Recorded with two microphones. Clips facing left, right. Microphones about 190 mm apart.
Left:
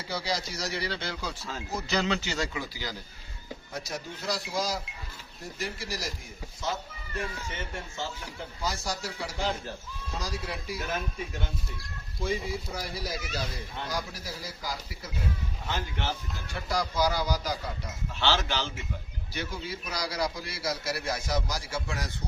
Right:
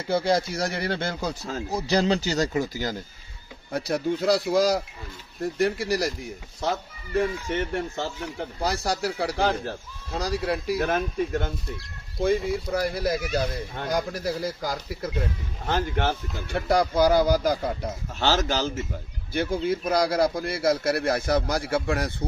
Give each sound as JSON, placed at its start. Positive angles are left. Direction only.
{"t": 0.1, "sound": "speech", "side_deg": -55}
{"t": 3.7, "sound": "speech", "side_deg": -60}
{"t": 7.6, "sound": "speech", "side_deg": -65}
{"t": 19.3, "sound": "speech", "side_deg": -50}